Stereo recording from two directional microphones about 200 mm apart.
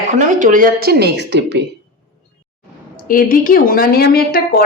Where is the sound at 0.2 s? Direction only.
40° right (ahead or behind); by 1.6 s 60° right (ahead or behind).